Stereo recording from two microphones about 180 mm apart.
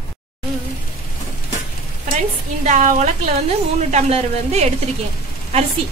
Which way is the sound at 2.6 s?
45° right (ahead or behind).